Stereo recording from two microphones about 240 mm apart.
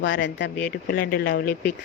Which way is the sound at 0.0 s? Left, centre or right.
Left.